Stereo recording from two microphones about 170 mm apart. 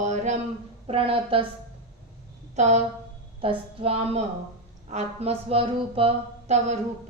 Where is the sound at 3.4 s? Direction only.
35° right (ahead or behind).